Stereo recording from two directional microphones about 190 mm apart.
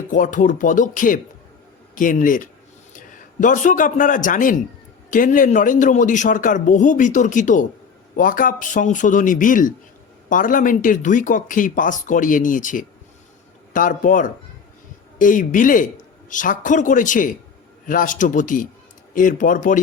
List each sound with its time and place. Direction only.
0.1 s speech: 45° left (ahead or behind)